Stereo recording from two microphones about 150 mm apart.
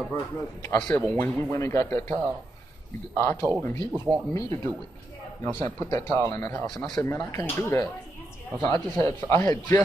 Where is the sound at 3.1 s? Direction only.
15° left (ahead or behind).